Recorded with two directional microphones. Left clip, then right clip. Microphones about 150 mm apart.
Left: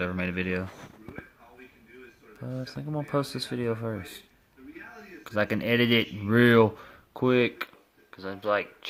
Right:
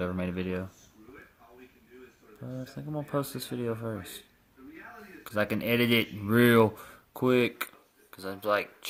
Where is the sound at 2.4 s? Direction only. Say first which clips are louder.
Left 4 dB; 10° left (ahead or behind).